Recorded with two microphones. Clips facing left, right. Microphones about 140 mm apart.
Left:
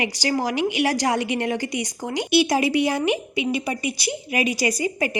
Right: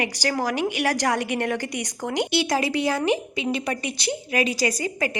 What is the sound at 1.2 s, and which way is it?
Speech, 50° right (ahead or behind).